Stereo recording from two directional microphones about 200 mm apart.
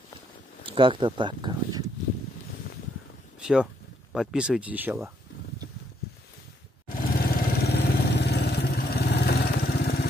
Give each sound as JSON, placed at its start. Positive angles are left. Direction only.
{"t": 0.7, "sound": "speech", "side_deg": -25}
{"t": 3.3, "sound": "a sound", "side_deg": -5}
{"t": 4.1, "sound": "speech", "side_deg": 0}
{"t": 6.9, "sound": "vehicle", "side_deg": 45}